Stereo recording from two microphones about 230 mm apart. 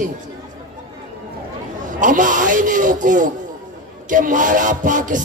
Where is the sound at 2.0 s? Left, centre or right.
Right.